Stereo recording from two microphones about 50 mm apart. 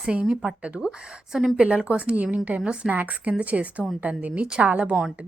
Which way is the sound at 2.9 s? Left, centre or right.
Right.